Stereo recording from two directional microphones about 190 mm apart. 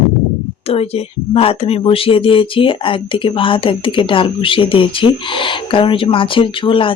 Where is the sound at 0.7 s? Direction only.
30° left (ahead or behind).